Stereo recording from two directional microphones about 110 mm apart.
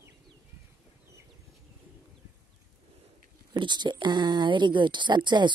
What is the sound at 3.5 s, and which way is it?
Speech, 45° right (ahead or behind).